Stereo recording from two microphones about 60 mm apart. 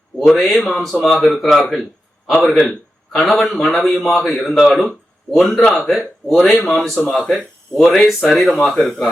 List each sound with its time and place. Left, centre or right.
0.2 s a man's voice: centre